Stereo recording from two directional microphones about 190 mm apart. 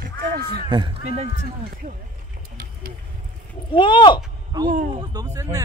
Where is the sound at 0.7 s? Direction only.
25° right (ahead or behind).